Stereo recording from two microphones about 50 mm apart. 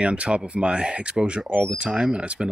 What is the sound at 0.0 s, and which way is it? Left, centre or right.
Speech, right.